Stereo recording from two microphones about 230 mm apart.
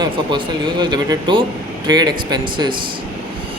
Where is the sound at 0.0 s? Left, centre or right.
Centre.